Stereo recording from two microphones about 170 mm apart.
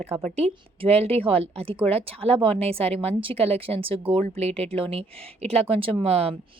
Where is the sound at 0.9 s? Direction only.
35° right (ahead or behind).